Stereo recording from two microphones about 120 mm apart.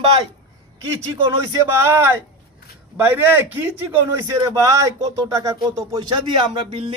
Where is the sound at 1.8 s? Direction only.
20° right (ahead or behind).